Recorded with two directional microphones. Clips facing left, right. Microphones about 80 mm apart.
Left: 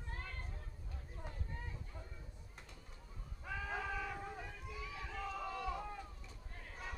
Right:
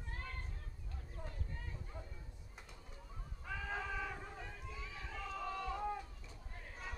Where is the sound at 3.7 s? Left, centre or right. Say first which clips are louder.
Even; centre.